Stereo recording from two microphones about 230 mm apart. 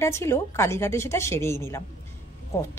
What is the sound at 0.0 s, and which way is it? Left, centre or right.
A woman's voice, centre.